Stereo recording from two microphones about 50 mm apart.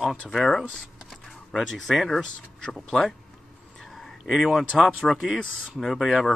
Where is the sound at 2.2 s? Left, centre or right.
Centre.